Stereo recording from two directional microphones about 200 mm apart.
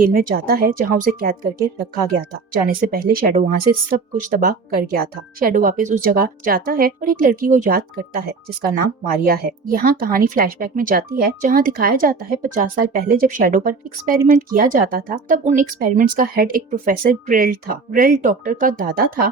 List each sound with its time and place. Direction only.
0.0 s speech: 45° right (ahead or behind)